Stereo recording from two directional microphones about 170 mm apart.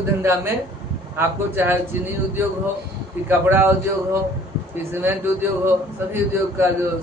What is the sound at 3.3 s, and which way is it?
Speech, 15° right (ahead or behind).